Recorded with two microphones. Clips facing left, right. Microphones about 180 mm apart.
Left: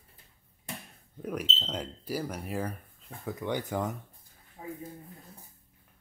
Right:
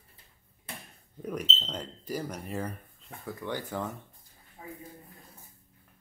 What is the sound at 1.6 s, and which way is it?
Speech, 10° left (ahead or behind).